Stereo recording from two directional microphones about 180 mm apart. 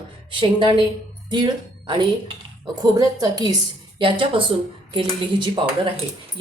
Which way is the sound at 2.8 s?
20° right (ahead or behind).